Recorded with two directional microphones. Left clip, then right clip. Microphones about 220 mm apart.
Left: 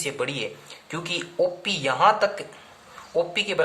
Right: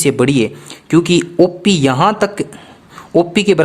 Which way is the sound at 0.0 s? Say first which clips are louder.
Right 14 dB; 45° right (ahead or behind).